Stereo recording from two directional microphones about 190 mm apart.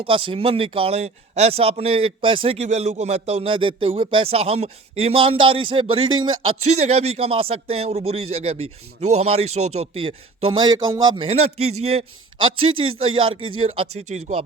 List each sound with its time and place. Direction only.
0.0 s speech: 25° right (ahead or behind)